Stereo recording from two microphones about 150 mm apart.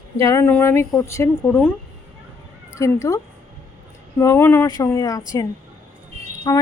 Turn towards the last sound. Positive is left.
turn(degrees=25)  # may be behind; listen again after turning